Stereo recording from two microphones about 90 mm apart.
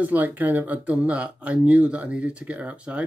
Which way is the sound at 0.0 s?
20° right (ahead or behind).